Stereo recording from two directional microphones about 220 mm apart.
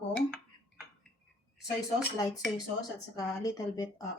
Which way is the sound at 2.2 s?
15° left (ahead or behind).